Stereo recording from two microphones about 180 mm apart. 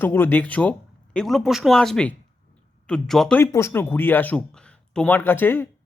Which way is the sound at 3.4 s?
15° left (ahead or behind).